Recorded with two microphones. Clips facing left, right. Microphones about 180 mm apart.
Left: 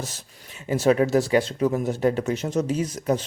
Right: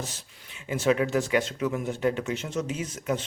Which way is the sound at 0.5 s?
40° left (ahead or behind).